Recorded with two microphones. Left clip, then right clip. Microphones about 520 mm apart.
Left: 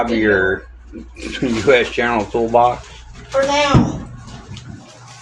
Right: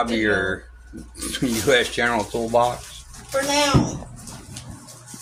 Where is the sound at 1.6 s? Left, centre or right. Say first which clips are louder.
Left 5 dB; right.